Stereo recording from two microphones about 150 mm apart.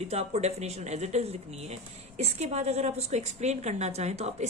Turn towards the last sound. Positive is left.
turn(degrees=-45)  # may be behind; listen again after turning